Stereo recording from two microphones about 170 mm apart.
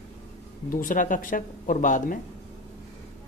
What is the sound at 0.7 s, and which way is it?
Speech, 55° left (ahead or behind).